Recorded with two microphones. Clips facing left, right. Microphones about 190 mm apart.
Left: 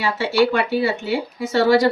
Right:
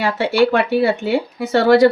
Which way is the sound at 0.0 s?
60° right (ahead or behind).